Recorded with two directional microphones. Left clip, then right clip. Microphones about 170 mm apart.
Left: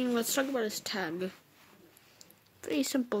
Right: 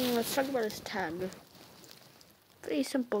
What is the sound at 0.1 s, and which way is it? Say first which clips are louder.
Speech: even; 30° left (ahead or behind).